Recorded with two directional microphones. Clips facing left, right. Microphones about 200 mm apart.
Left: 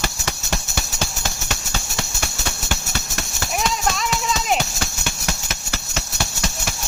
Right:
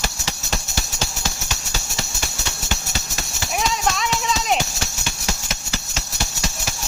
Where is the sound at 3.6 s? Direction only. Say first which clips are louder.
Right 1 dB; centre (ahead or behind).